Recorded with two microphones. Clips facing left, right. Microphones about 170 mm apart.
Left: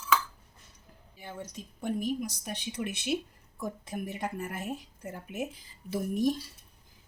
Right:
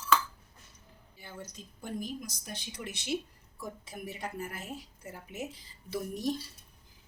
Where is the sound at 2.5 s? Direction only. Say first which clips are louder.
Left 4 dB; 60° left (ahead or behind).